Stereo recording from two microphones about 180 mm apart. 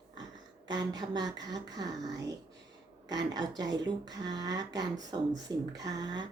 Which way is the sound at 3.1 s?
20° right (ahead or behind).